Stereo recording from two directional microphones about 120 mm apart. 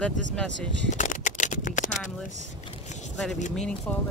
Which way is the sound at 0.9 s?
90° left.